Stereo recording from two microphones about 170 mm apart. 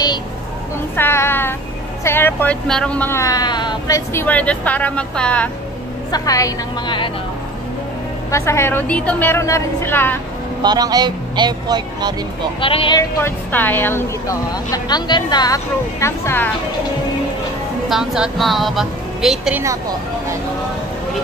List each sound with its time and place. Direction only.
0.9 s speech: 15° left (ahead or behind)
6.1 s a woman's voice: 20° left (ahead or behind)
8.3 s speech: 15° left (ahead or behind)
10.6 s speech: 25° right (ahead or behind)
12.5 s speech: 30° left (ahead or behind)
13.2 s speech: 10° left (ahead or behind)
17.8 s a woman's voice: 5° right (ahead or behind)